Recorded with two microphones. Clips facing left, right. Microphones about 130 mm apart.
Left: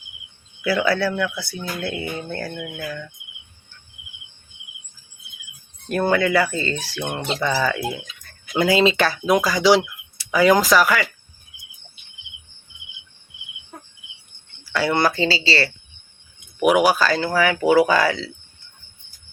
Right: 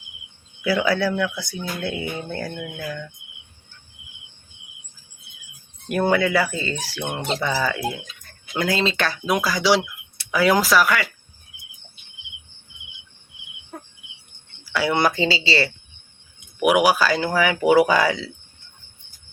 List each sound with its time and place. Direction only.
0.6 s speech: 15° right (ahead or behind)
2.8 s speech: centre (ahead or behind)
5.9 s speech: 10° right (ahead or behind)
14.6 s speech: 10° right (ahead or behind)
16.6 s speech: 10° right (ahead or behind)